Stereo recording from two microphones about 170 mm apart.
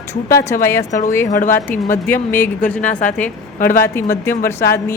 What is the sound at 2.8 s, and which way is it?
Speech, 50° left (ahead or behind).